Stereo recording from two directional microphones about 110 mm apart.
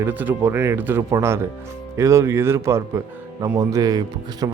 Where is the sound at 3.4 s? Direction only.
35° right (ahead or behind).